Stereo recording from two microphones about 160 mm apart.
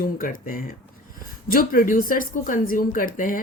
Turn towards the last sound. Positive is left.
turn(degrees=60)  # may be behind; listen again after turning